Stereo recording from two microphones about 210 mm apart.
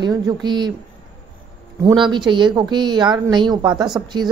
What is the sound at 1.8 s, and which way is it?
Speech, 20° right (ahead or behind).